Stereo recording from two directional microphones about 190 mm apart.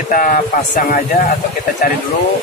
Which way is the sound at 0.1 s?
45° left (ahead or behind).